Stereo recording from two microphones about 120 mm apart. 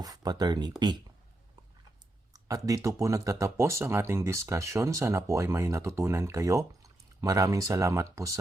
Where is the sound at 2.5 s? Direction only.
30° right (ahead or behind).